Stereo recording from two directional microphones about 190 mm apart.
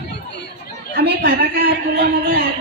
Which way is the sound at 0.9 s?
60° right (ahead or behind).